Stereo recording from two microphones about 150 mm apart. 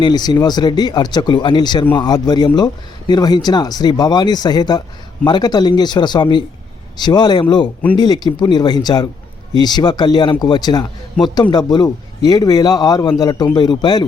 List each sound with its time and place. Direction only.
0.0 s speech: 25° left (ahead or behind)